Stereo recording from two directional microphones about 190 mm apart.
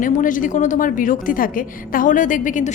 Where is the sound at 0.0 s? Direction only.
45° left (ahead or behind).